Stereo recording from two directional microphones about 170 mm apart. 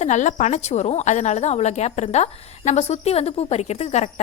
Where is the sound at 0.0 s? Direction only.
45° left (ahead or behind).